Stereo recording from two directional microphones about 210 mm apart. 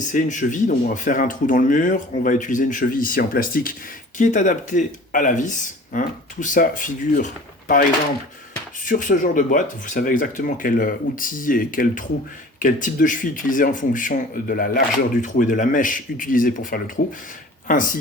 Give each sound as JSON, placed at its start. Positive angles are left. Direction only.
{"t": 0.0, "sound": "speech", "side_deg": 35}